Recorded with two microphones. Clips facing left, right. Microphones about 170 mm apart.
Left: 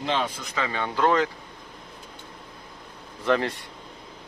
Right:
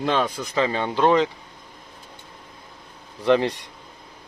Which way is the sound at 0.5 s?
30° right (ahead or behind).